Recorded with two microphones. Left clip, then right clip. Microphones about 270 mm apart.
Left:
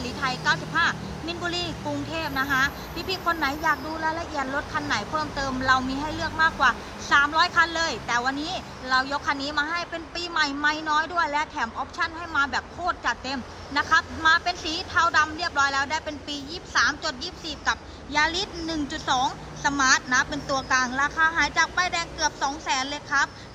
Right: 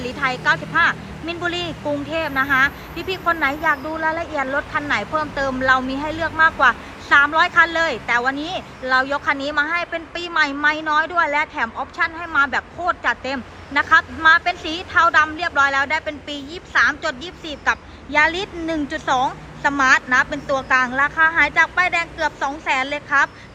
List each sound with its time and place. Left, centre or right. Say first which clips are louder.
0.0 s a woman's voice: right 6 dB; centre
8.4 s speech: right 4 dB; left
8.9 s a woman's voice: right 6 dB; centre